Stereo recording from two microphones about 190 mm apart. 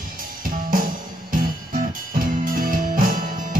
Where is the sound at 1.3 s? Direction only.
45° right (ahead or behind).